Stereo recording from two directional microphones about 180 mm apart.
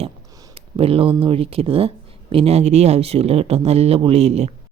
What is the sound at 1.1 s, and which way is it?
Speech, 30° right (ahead or behind).